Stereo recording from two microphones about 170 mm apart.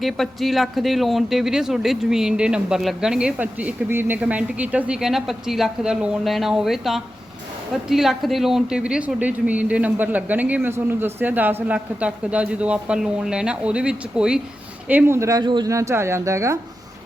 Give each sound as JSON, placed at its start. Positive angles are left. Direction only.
{"t": 0.0, "sound": "a man's voice", "side_deg": 0}